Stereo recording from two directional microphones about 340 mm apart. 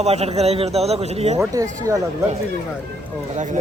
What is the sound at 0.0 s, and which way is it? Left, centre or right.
Speech, centre.